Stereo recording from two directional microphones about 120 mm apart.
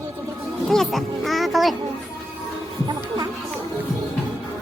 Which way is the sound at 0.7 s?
Centre (ahead or behind).